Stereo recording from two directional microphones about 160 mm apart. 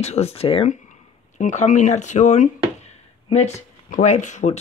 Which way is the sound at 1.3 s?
50° left (ahead or behind).